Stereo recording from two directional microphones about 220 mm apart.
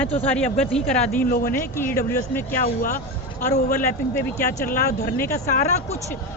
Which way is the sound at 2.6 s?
40° left (ahead or behind).